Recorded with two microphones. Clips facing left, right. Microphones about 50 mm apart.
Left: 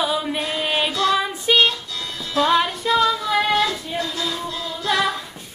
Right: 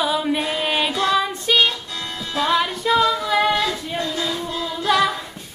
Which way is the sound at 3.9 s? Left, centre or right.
Right.